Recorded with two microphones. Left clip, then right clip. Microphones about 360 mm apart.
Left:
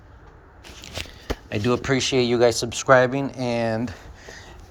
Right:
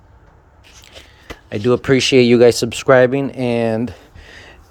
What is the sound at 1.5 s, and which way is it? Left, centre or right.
Speech, right.